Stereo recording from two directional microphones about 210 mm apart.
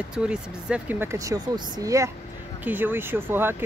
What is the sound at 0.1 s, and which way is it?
Speech, 5° right (ahead or behind).